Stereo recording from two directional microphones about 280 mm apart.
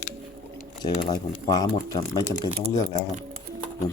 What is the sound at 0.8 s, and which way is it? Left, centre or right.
Speech, centre.